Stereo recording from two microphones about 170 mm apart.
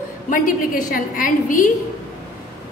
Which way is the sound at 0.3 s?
55° left (ahead or behind).